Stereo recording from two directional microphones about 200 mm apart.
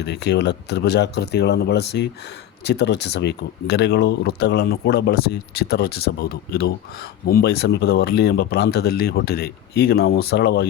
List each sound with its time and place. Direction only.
0.0 s speech: 55° left (ahead or behind)